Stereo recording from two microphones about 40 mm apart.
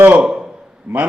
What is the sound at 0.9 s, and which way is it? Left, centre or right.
Speech, right.